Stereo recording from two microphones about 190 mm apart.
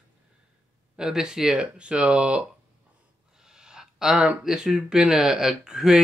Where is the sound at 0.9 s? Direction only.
5° right (ahead or behind).